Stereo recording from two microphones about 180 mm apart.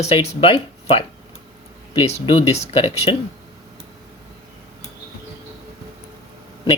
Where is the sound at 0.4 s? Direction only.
30° left (ahead or behind).